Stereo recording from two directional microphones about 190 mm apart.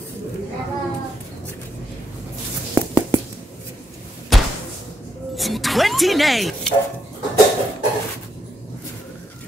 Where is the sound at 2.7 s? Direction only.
15° right (ahead or behind).